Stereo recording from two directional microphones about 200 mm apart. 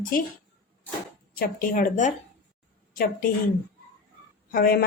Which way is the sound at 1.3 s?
45° left (ahead or behind).